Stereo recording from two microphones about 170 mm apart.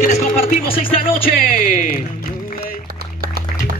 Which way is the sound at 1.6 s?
55° left (ahead or behind).